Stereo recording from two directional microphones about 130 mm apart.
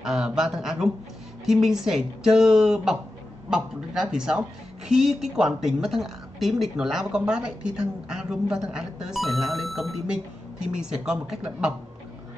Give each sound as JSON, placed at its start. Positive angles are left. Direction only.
{"t": 0.0, "sound": "speech", "side_deg": -5}